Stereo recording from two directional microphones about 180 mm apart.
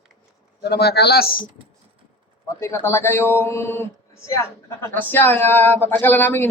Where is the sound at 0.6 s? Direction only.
65° left (ahead or behind).